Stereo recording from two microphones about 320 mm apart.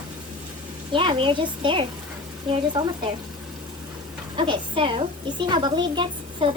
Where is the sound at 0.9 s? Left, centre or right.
Centre.